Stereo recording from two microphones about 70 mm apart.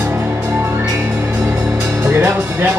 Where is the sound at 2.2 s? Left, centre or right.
Right.